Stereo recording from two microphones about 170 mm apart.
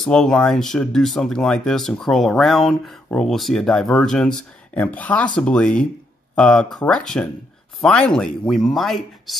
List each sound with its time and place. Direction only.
0.0 s speech: 5° left (ahead or behind)